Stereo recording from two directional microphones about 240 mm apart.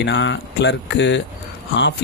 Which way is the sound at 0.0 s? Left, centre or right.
Left.